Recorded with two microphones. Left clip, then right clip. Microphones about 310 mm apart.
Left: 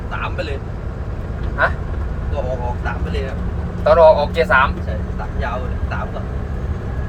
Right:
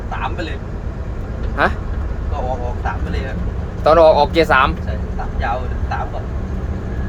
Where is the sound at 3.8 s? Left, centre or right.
Right.